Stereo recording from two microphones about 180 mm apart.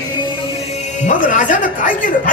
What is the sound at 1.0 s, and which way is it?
Speech, 45° left (ahead or behind).